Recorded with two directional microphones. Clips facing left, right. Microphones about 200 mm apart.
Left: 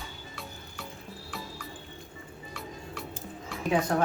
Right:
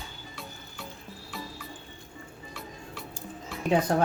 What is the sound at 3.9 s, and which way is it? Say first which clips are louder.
Speech: right 1 dB; 30° right (ahead or behind).